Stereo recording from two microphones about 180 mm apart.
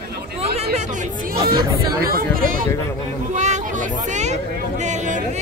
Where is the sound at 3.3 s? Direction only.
40° right (ahead or behind).